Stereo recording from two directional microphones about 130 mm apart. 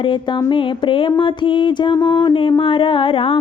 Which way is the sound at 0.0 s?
40° left (ahead or behind).